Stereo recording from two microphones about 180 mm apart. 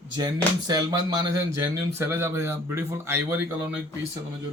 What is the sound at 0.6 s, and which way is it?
Speech, 20° right (ahead or behind).